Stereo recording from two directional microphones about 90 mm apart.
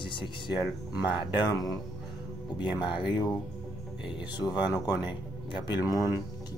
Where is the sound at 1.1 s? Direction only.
Centre (ahead or behind).